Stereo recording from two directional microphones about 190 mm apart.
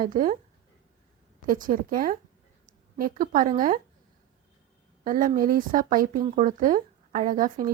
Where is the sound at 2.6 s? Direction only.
45° right (ahead or behind).